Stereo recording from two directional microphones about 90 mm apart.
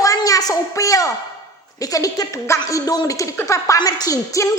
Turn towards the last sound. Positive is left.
turn(degrees=40)  # may be behind; listen again after turning